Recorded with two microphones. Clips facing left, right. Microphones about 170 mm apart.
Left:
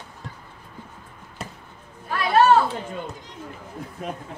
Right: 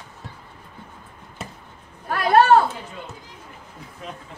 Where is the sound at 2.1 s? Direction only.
50° right (ahead or behind).